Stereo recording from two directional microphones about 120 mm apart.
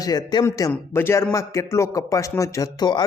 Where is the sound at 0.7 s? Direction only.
20° left (ahead or behind); by 3.1 s 35° left (ahead or behind).